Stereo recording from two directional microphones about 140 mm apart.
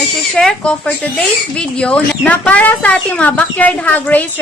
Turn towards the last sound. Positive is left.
turn(degrees=10)  # may be behind; listen again after turning